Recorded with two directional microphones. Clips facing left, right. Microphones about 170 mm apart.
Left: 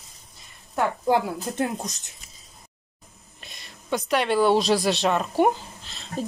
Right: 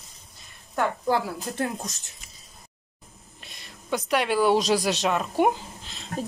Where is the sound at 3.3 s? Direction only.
5° right (ahead or behind).